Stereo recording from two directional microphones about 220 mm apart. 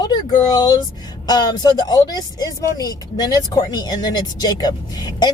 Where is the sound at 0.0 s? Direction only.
20° left (ahead or behind).